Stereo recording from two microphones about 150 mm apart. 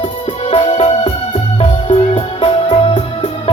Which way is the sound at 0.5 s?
45° left (ahead or behind).